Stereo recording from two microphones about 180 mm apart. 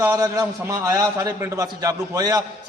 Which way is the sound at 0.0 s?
15° right (ahead or behind).